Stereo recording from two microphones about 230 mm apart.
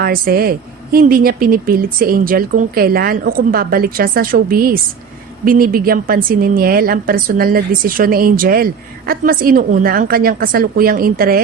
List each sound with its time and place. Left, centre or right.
0.0 s a woman's voice: right